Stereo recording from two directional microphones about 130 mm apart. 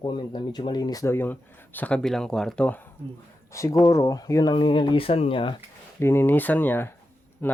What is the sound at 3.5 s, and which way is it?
Speech, 25° left (ahead or behind).